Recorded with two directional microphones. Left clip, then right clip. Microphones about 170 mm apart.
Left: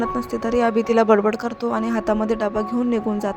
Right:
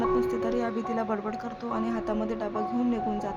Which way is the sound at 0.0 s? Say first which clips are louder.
Left 2 dB; 30° left (ahead or behind).